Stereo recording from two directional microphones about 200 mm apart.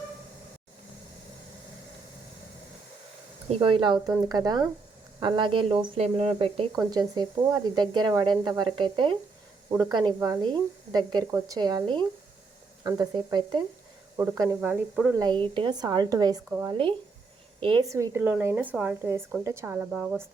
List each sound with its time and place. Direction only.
3.5 s speech: 25° right (ahead or behind); by 15.1 s 5° right (ahead or behind)
15.1 s speech: 20° right (ahead or behind)